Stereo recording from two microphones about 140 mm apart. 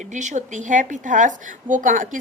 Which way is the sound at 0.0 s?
60° right (ahead or behind).